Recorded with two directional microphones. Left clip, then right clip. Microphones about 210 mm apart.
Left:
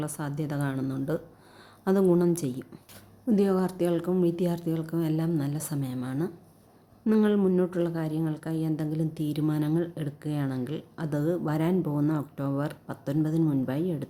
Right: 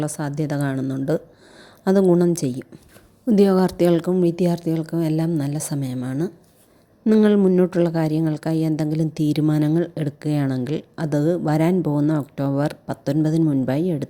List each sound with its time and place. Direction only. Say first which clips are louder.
0.0 s a woman's voice: right 8 dB; 25° right (ahead or behind)